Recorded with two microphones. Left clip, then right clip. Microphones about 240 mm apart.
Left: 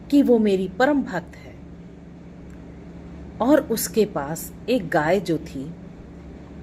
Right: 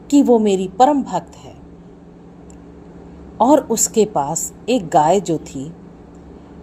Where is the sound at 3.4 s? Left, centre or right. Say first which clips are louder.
Right 5 dB; right.